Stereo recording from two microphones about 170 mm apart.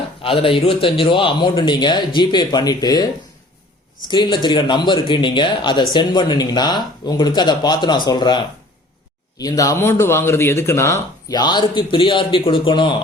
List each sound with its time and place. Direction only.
0.2 s speech: 30° left (ahead or behind)
4.1 s speech: 25° left (ahead or behind)
9.4 s speech: 20° left (ahead or behind)